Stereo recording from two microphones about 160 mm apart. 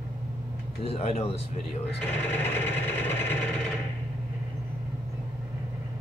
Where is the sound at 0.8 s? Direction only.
40° left (ahead or behind).